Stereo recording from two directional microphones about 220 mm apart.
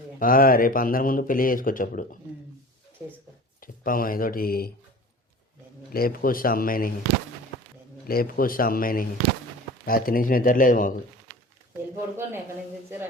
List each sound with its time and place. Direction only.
0.2 s speech: 40° left (ahead or behind)
3.6 s speech: 40° left (ahead or behind)
5.9 s speech: 40° left (ahead or behind)
8.0 s speech: 40° left (ahead or behind)
11.9 s speech: 10° right (ahead or behind)